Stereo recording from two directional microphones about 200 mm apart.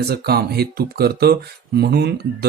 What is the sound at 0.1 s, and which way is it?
Speech, 50° right (ahead or behind).